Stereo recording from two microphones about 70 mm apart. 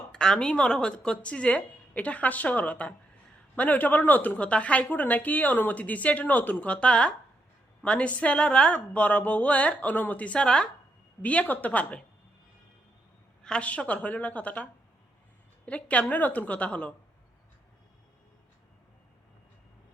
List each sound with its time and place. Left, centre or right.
0.1 s speech: centre
13.4 s speech: centre